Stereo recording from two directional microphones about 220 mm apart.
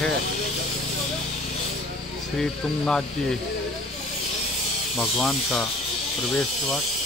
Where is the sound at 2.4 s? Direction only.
5° left (ahead or behind).